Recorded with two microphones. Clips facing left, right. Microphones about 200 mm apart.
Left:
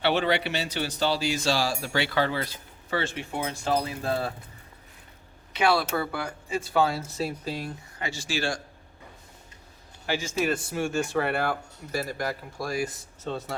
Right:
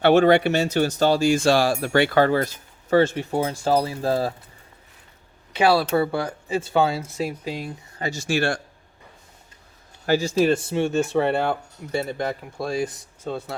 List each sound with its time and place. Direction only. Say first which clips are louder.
0.0 s speech: right 9 dB; 50° right (ahead or behind)
5.5 s speech: right 6 dB; 30° right (ahead or behind)
7.0 s speech: right 3 dB; 10° right (ahead or behind)
7.9 s speech: right 8 dB; 40° right (ahead or behind); by 8.6 s 60° right (ahead or behind)
10.1 s speech: right 8 dB; 35° right (ahead or behind)
13.2 s speech: right 3 dB; 10° right (ahead or behind)